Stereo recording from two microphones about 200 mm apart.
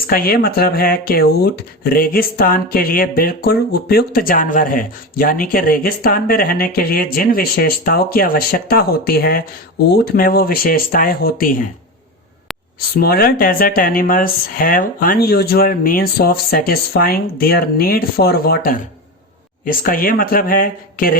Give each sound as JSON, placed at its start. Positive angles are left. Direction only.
{"t": 0.1, "sound": "speech", "side_deg": 50}
{"t": 13.0, "sound": "speech", "side_deg": 50}